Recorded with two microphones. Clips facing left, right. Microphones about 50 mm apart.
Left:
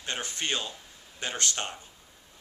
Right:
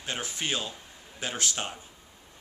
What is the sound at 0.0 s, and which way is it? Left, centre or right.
Speech, centre.